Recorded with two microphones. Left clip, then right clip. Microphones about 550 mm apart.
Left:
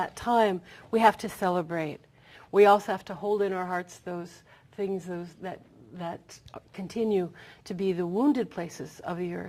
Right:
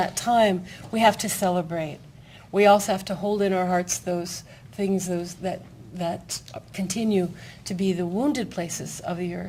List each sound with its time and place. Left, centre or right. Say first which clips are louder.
0.0 s speech: right 4 dB; left